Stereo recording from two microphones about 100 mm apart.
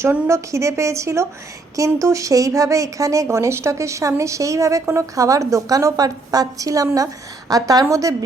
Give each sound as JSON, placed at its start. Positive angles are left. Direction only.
{"t": 0.0, "sound": "a woman's voice", "side_deg": -25}